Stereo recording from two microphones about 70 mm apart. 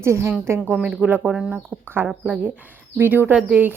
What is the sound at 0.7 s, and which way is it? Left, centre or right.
Speech, centre.